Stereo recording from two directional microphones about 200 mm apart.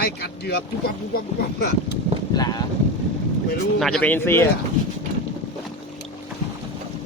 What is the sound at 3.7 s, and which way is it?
Speech, 5° left (ahead or behind).